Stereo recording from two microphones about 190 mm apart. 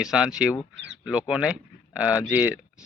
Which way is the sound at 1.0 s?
5° right (ahead or behind).